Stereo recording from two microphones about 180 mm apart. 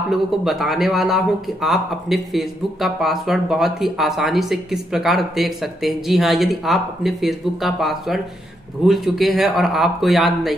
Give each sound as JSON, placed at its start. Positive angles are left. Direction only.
{"t": 0.1, "sound": "speech", "side_deg": 0}